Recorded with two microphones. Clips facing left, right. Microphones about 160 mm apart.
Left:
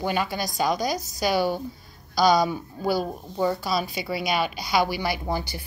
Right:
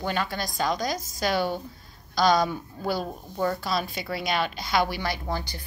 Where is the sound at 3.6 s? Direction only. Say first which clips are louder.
Left 2 dB; 5° left (ahead or behind).